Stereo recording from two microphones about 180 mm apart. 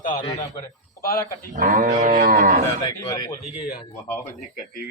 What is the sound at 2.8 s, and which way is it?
Speech, 20° left (ahead or behind).